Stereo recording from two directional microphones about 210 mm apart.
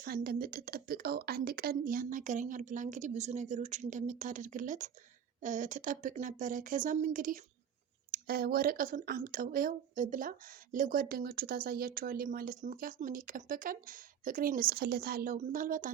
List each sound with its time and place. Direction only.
0.0 s a woman's voice: 45° right (ahead or behind)